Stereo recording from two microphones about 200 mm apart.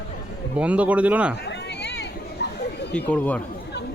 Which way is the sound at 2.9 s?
5° left (ahead or behind).